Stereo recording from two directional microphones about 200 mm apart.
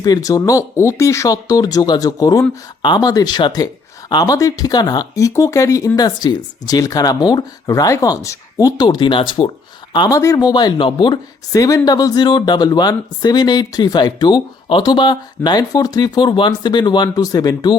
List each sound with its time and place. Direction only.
0.0 s speech: 20° left (ahead or behind)